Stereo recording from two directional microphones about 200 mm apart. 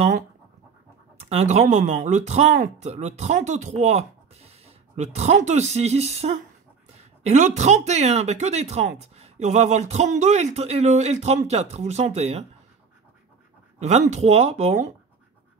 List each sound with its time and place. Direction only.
1.3 s speech: 35° right (ahead or behind)
13.7 s speech: 35° right (ahead or behind)